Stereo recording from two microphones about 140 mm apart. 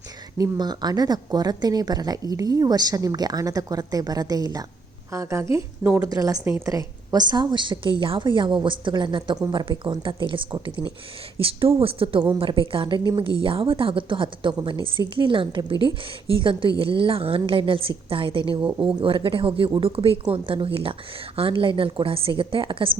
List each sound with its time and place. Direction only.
0.3 s a woman's voice: 25° right (ahead or behind)